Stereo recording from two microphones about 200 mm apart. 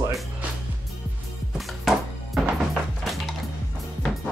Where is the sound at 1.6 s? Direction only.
Centre (ahead or behind).